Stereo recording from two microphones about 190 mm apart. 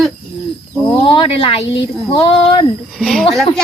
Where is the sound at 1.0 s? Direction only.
25° left (ahead or behind).